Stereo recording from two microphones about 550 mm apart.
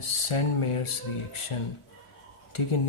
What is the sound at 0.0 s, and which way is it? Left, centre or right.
Speech, left.